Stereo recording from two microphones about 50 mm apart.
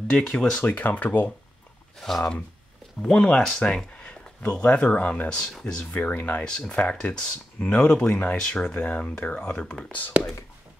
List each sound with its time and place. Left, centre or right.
0.2 s speech: centre
0.7 s speech: left
2.0 s speech: centre
3.0 s speech: centre
5.6 s speech: centre
5.9 s speech: left
6.4 s speech: centre
8.4 s speech: centre
8.7 s speech: left